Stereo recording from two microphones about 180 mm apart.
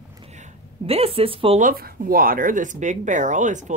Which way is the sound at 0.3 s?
35° right (ahead or behind).